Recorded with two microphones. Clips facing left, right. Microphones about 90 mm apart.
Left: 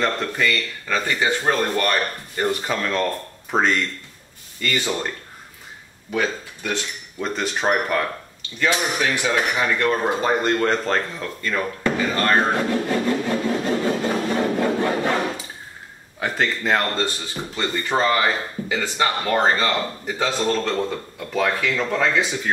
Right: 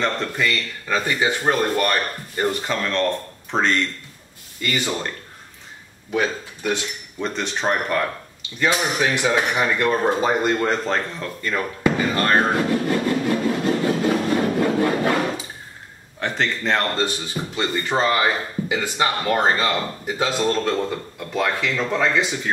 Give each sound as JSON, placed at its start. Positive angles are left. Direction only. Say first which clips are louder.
{"t": 0.0, "sound": "speech", "louder": "left 1 dB", "side_deg": 0}
{"t": 2.6, "sound": "speech", "louder": "right 1 dB", "side_deg": 5}
{"t": 4.6, "sound": "speech", "louder": "even", "side_deg": -15}
{"t": 6.1, "sound": "speech", "louder": "right 1 dB", "side_deg": -15}
{"t": 7.2, "sound": "speech", "louder": "left 1 dB", "side_deg": 0}
{"t": 8.5, "sound": "speech", "louder": "right 1 dB", "side_deg": -15}
{"t": 11.4, "sound": "a sound", "louder": "right 2 dB", "side_deg": -10}
{"t": 16.2, "sound": "speech", "louder": "left 1 dB", "side_deg": 5}
{"t": 17.0, "sound": "speech", "louder": "right 2 dB", "side_deg": -15}